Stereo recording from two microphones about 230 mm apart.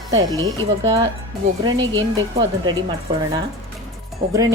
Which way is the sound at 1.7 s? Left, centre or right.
Right.